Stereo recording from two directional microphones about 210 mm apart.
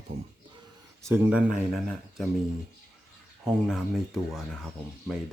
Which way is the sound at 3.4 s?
5° right (ahead or behind).